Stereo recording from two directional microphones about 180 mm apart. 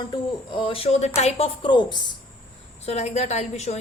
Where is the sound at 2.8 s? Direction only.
40° left (ahead or behind).